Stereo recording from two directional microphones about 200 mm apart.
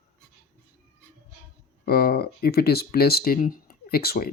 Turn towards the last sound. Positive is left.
turn(degrees=50)  # may be behind; listen again after turning